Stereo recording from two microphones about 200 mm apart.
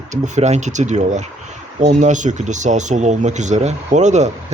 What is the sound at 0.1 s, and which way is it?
Speech, 35° right (ahead or behind).